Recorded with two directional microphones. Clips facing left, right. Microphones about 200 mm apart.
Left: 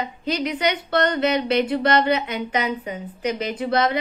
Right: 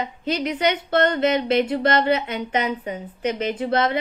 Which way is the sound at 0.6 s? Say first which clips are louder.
Right 3 dB; 45° right (ahead or behind).